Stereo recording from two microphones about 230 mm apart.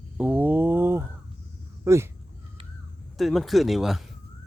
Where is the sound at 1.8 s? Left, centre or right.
Centre.